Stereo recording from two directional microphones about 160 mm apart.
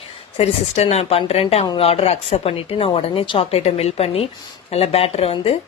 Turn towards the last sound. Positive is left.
turn(degrees=35)  # may be behind; listen again after turning